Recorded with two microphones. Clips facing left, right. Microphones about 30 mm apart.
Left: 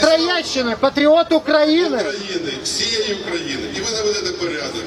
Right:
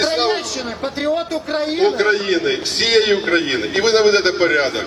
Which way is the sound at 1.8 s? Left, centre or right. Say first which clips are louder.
Right 5 dB; right.